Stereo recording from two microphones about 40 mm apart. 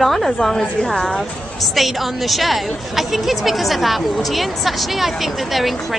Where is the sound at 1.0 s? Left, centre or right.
Centre.